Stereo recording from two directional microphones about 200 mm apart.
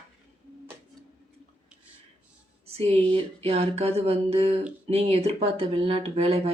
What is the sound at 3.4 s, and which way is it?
Speech, 30° right (ahead or behind).